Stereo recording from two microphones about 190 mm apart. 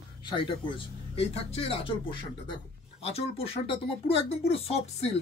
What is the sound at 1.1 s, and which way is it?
Speech, 30° left (ahead or behind).